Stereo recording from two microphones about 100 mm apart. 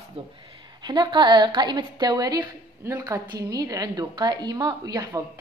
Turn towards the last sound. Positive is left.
turn(degrees=-40)  # may be behind; listen again after turning